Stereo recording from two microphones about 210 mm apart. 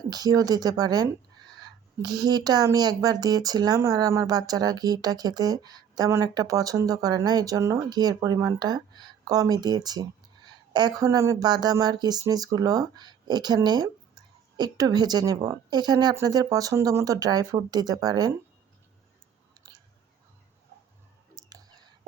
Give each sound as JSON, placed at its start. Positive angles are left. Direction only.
{"t": 0.1, "sound": "speech", "side_deg": -20}
{"t": 19.6, "sound": "chewing", "side_deg": -15}
{"t": 21.3, "sound": "clicking", "side_deg": -20}